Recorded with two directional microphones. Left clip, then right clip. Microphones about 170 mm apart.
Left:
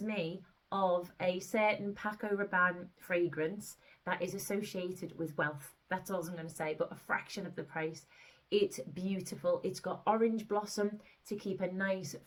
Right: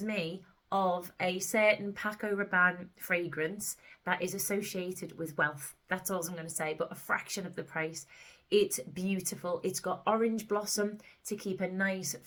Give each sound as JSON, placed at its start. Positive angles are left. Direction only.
{"t": 0.0, "sound": "speech", "side_deg": -20}